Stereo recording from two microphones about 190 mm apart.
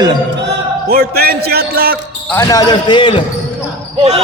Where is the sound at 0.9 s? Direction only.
55° right (ahead or behind).